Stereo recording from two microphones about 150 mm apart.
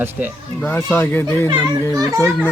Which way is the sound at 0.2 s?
10° right (ahead or behind).